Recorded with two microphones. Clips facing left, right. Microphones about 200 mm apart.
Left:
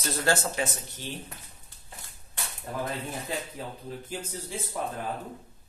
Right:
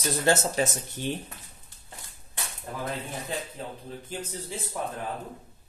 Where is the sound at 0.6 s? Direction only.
40° right (ahead or behind).